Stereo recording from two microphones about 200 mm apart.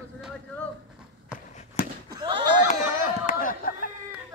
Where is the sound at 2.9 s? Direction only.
40° left (ahead or behind).